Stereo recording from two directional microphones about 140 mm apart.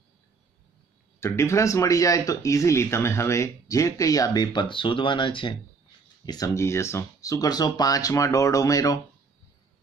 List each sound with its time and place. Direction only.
1.2 s speech: 20° left (ahead or behind)